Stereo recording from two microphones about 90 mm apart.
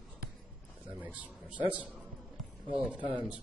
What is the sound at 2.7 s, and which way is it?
Speech, 15° right (ahead or behind).